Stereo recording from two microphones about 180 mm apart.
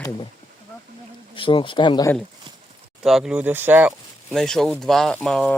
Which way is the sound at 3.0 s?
5° right (ahead or behind).